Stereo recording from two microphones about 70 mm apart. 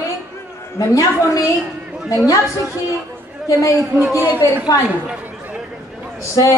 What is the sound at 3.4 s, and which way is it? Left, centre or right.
Speech, left.